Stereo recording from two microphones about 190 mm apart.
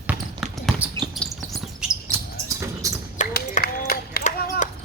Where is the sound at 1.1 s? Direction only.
Centre (ahead or behind).